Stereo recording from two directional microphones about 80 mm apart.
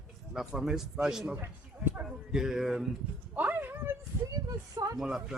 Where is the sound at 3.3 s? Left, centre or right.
Right.